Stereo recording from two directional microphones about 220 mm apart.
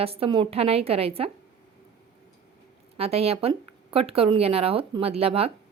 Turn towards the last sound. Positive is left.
turn(degrees=-25)  # may be behind; listen again after turning